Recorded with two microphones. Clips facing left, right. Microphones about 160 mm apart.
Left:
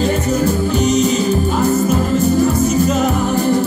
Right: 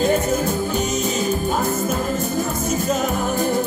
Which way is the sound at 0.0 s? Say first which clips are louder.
Left 3 dB; 50° right (ahead or behind).